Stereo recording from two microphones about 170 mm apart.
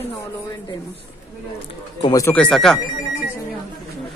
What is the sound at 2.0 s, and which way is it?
Speech, 20° left (ahead or behind).